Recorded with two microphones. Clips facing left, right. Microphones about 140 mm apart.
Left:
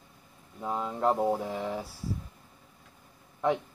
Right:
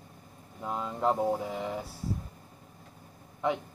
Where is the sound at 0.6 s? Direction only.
5° left (ahead or behind).